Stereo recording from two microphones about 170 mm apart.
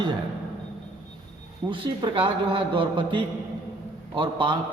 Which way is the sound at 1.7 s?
30° right (ahead or behind).